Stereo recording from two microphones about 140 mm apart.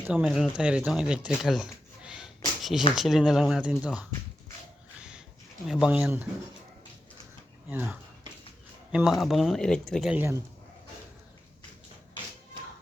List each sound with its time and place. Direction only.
0.0 s speech: 10° right (ahead or behind)
1.4 s a sound: centre (ahead or behind)
2.9 s speech: centre (ahead or behind)
4.9 s a sound: 5° right (ahead or behind)
5.6 s speech: 5° right (ahead or behind)
7.7 s speech: 10° right (ahead or behind)
10.2 s speech: 20° right (ahead or behind)